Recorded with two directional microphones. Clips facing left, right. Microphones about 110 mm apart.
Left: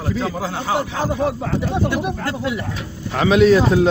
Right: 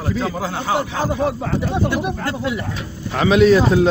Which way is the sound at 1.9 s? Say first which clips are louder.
Even; 30° right (ahead or behind).